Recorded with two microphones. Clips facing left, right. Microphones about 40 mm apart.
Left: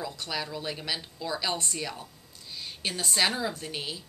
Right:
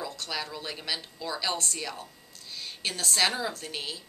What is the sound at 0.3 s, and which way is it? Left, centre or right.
A woman's voice, centre.